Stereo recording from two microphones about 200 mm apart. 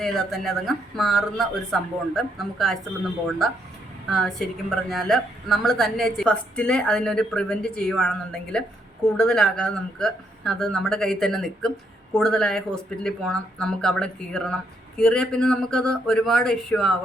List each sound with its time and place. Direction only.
0.0 s a woman's voice: centre (ahead or behind)
4.1 s a woman's voice: centre (ahead or behind)